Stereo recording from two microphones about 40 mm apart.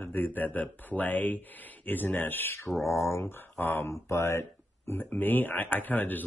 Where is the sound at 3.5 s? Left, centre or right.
Left.